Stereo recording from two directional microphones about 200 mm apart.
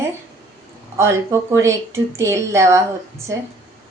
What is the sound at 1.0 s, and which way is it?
A woman's voice, 15° right (ahead or behind).